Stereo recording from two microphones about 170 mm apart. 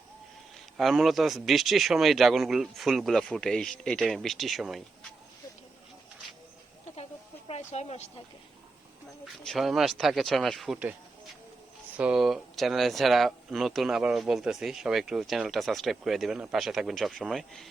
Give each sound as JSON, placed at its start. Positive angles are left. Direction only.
{"t": 0.8, "sound": "speech", "side_deg": 0}
{"t": 6.9, "sound": "a sound", "side_deg": 35}
{"t": 9.2, "sound": "speech", "side_deg": 0}
{"t": 11.9, "sound": "speech", "side_deg": -5}